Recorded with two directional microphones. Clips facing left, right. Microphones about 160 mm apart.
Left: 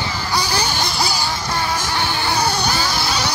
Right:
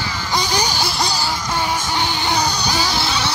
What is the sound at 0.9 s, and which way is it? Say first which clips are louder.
Music: even; 5° left (ahead or behind).